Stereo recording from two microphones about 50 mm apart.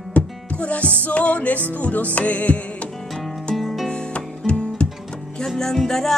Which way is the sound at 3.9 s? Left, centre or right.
Centre.